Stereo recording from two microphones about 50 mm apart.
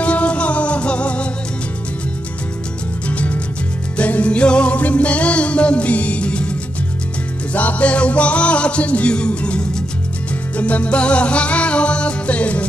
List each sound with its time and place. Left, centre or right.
0.0 s music: left
3.1 s music: left
7.5 s music: left